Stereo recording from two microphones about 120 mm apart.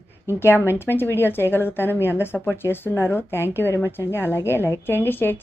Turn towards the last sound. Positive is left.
turn(degrees=15)  # may be behind; listen again after turning